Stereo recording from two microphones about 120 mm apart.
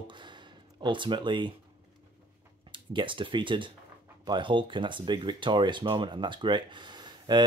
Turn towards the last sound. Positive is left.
turn(degrees=-35)  # may be behind; listen again after turning